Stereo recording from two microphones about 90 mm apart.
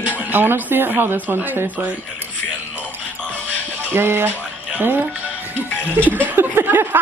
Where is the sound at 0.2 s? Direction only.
20° right (ahead or behind).